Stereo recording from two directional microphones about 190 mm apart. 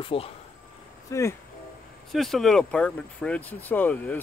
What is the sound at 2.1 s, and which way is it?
Speech, centre (ahead or behind).